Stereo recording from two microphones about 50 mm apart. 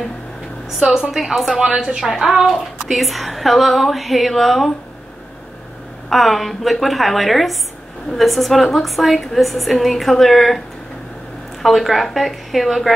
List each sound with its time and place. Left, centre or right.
0.7 s a woman's voice: centre
1.1 s a woman's voice: centre
1.5 s a woman's voice: centre
6.0 s a woman's voice: centre
11.6 s a woman's voice: centre